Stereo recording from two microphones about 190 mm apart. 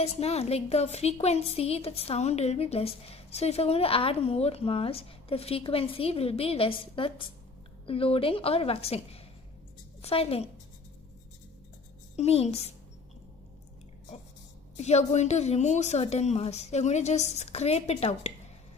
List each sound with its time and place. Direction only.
0.0 s a woman's voice: 30° left (ahead or behind)
12.1 s a woman's voice: 35° left (ahead or behind)
14.8 s a woman's voice: 35° left (ahead or behind)